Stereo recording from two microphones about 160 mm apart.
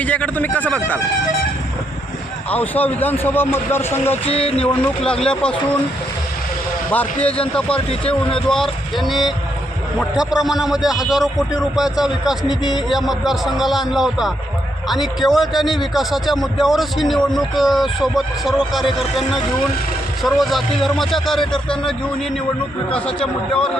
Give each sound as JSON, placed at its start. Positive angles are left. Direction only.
{"t": 0.0, "sound": "speech", "side_deg": 10}
{"t": 2.5, "sound": "speech", "side_deg": 10}
{"t": 4.3, "sound": "a sound", "side_deg": 40}
{"t": 4.6, "sound": "speech", "side_deg": 10}
{"t": 6.9, "sound": "a man's voice", "side_deg": 10}